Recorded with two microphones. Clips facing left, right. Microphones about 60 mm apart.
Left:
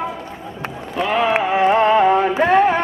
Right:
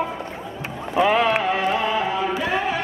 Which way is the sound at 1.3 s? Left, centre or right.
Centre.